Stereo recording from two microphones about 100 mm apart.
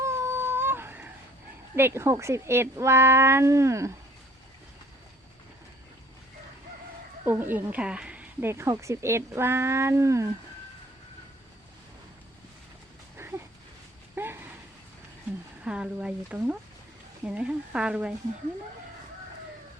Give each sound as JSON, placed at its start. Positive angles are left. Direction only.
{"t": 0.0, "sound": "a sound", "side_deg": -25}
{"t": 1.7, "sound": "speech", "side_deg": -25}
{"t": 7.3, "sound": "a woman's voice", "side_deg": -20}
{"t": 8.4, "sound": "speech", "side_deg": -25}
{"t": 14.2, "sound": "a sound", "side_deg": -20}
{"t": 15.6, "sound": "a woman's voice", "side_deg": -10}